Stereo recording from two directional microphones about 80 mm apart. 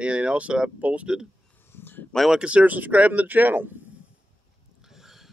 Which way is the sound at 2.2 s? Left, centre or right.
Centre.